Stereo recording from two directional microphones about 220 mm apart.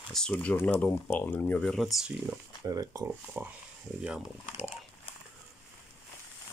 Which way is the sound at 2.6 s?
15° right (ahead or behind).